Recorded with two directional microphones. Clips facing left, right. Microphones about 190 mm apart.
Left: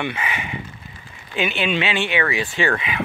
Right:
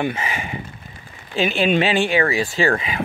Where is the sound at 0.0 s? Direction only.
40° right (ahead or behind).